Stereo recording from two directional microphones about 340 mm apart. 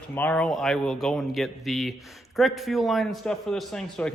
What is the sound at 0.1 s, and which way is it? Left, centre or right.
Speech, centre.